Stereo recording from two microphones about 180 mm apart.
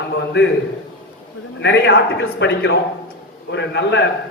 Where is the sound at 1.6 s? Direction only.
90° left; by 4.0 s 75° left (ahead or behind).